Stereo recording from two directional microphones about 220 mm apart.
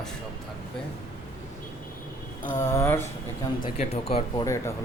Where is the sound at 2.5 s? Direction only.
15° left (ahead or behind).